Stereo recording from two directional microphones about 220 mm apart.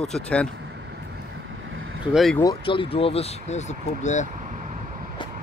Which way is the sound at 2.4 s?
20° left (ahead or behind).